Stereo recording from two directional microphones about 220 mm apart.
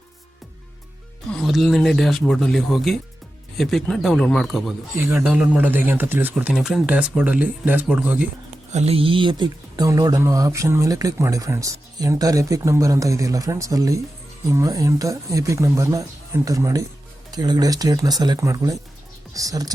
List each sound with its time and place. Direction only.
1.3 s speech: centre (ahead or behind)
8.7 s speech: 30° right (ahead or behind)